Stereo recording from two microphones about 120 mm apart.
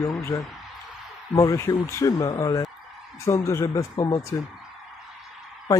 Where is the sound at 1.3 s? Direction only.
30° left (ahead or behind).